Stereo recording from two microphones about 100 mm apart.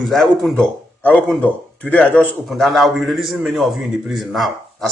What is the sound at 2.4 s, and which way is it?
Speech, centre (ahead or behind).